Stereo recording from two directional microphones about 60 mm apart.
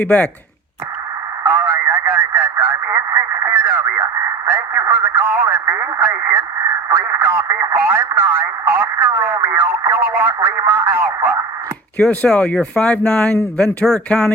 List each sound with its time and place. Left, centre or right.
0.0 s speech: left
1.5 s a sound: right
2.8 s radio: right
3.5 s radio: right
4.4 s a sound: right
6.1 s radio: right
7.2 s a sound: right
7.4 s radio: right
7.7 s radio: right
11.9 s speech: left